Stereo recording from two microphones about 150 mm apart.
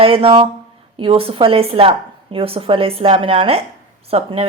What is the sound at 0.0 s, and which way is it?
Speech, 40° right (ahead or behind).